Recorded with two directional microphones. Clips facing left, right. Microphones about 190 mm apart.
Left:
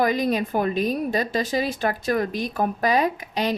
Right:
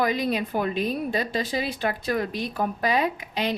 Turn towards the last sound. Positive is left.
turn(degrees=45)  # may be behind; listen again after turning